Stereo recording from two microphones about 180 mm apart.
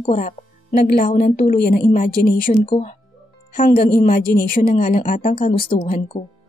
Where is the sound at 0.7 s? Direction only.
60° left (ahead or behind).